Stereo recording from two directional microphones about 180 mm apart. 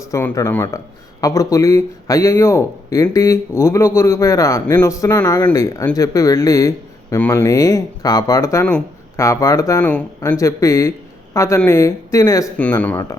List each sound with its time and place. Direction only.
0.1 s speech: 15° left (ahead or behind)
8.6 s a sound: 5° left (ahead or behind)
9.2 s speech: 20° left (ahead or behind)